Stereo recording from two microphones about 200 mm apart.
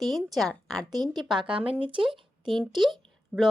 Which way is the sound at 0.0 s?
Centre (ahead or behind).